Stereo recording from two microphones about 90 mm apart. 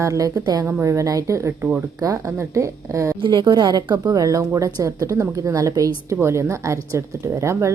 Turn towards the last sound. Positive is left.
turn(degrees=-35)  # may be behind; listen again after turning